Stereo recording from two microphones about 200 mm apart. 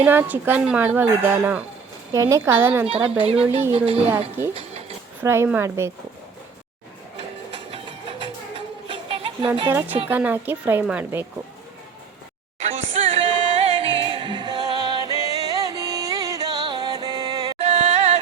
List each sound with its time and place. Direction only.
0.0 s speech: 10° right (ahead or behind)
2.8 s speech: 30° right (ahead or behind)
4.4 s speech: 10° right (ahead or behind)
7.7 s music: 25° right (ahead or behind)
9.6 s speech: 10° right (ahead or behind)
12.5 s music: 30° right (ahead or behind)
17.6 s music: 35° right (ahead or behind)